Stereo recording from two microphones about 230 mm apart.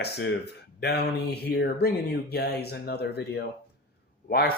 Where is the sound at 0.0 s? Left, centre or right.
Left.